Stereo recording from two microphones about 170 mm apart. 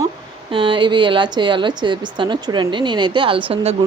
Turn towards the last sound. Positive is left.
turn(degrees=-35)  # may be behind; listen again after turning